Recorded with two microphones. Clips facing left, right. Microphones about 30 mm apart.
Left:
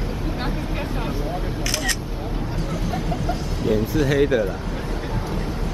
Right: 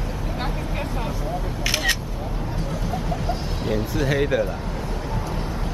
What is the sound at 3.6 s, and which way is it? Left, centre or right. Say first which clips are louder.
Speech: left 4 dB; centre.